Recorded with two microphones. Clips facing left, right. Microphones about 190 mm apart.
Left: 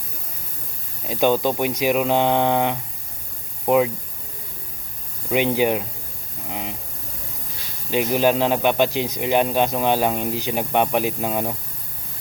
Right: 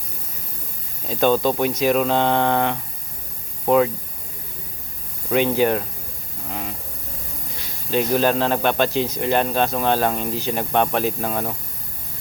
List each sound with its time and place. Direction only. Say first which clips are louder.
1.0 s speech: right 1 dB; 10° left (ahead or behind)
5.3 s speech: right 1 dB; 15° left (ahead or behind)
6.5 s a sound: even; 15° left (ahead or behind)
7.9 s speech: even; 15° left (ahead or behind)